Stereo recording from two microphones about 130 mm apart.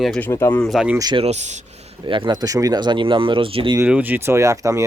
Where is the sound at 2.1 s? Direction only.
40° right (ahead or behind).